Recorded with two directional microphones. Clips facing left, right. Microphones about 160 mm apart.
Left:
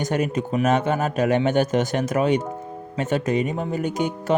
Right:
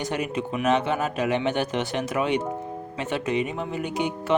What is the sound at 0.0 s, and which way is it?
Speech, 45° left (ahead or behind).